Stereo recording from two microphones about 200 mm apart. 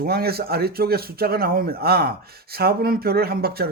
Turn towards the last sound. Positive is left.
turn(degrees=-50)  # may be behind; listen again after turning